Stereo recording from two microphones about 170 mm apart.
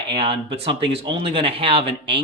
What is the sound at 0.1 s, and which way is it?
Speech, 30° right (ahead or behind).